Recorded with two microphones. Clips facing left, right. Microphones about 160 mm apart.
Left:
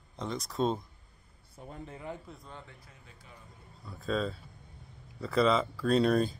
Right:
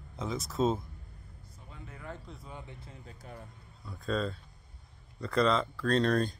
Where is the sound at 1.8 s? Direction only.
25° left (ahead or behind).